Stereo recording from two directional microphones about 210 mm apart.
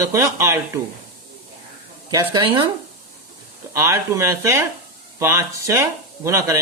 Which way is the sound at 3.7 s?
15° right (ahead or behind).